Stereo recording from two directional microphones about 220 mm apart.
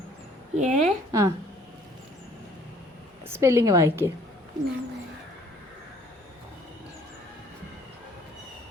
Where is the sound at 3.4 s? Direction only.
15° right (ahead or behind).